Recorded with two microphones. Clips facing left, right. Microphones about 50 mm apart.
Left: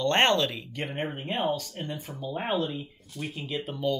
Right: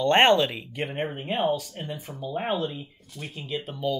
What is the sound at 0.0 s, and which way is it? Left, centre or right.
Speech, centre.